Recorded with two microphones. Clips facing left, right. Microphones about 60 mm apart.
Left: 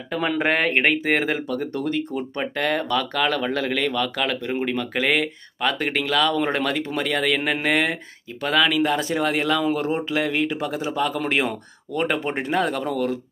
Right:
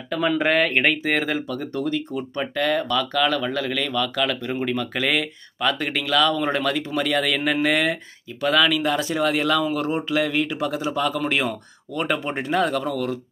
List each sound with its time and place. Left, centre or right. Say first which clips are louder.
0.4 s speech: left 1 dB; left
1.5 s speech: even; left
7.0 s speech: even; left